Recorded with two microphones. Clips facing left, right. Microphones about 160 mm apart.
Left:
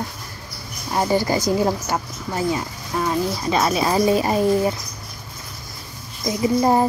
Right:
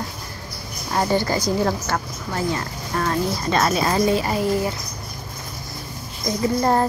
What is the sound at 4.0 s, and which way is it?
Speech, 15° left (ahead or behind).